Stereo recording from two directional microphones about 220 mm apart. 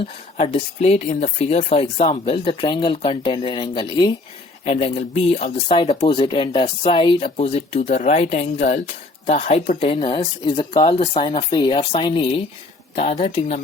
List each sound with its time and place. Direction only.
0.0 s speech: 30° left (ahead or behind)